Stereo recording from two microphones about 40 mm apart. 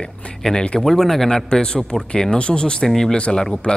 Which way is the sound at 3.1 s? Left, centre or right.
Left.